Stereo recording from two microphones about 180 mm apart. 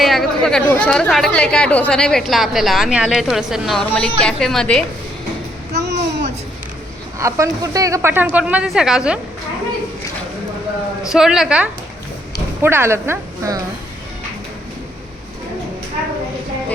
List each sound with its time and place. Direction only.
0.0 s speech: centre (ahead or behind)
5.7 s a sound: 70° right (ahead or behind)
7.2 s speech: 15° right (ahead or behind)
11.1 s speech: centre (ahead or behind)